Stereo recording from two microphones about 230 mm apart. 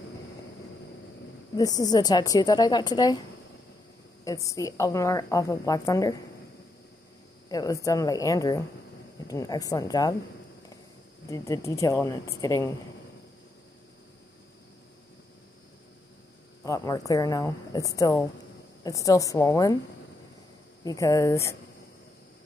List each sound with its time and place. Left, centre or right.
1.6 s a woman's voice: centre
7.4 s a woman's voice: centre
11.2 s a woman's voice: centre
16.6 s a woman's voice: centre
20.8 s a woman's voice: centre